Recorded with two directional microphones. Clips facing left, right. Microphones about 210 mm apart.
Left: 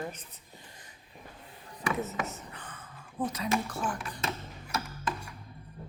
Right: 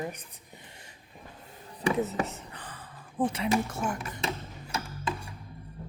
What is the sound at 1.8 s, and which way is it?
Speech, 35° right (ahead or behind).